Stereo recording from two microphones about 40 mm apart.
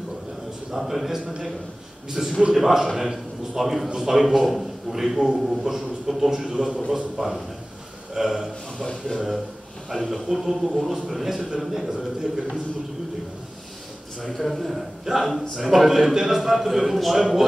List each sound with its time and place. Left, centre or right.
0.7 s a man's voice: centre
8.7 s speech: left
10.0 s a man's voice: centre
14.3 s speech: centre
15.1 s a man's voice: centre